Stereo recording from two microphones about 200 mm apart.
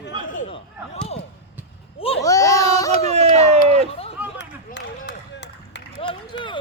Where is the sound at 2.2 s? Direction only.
15° left (ahead or behind).